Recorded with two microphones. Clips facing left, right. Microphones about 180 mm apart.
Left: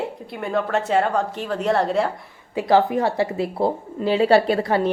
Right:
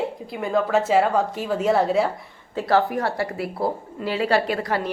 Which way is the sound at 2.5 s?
20° left (ahead or behind).